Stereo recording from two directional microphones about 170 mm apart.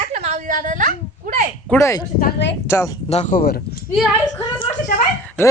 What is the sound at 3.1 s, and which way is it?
Speech, 45° left (ahead or behind).